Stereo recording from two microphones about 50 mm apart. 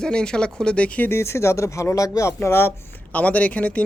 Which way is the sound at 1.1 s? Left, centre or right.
Left.